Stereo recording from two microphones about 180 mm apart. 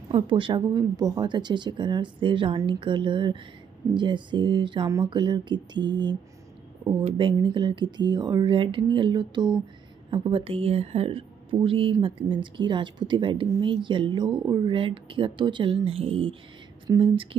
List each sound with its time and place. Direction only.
0.1 s speech: 30° right (ahead or behind)